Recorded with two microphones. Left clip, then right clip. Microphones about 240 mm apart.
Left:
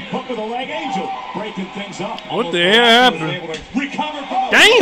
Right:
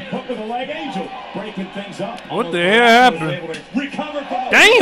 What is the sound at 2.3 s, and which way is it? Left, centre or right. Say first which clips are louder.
Speech: left 1 dB; right.